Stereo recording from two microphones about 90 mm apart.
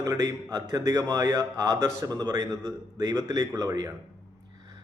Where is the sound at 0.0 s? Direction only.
45° right (ahead or behind).